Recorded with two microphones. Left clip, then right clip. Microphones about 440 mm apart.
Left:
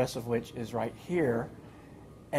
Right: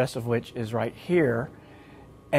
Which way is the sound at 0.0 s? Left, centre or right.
Right.